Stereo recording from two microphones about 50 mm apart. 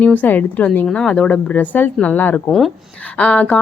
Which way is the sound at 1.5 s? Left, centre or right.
Left.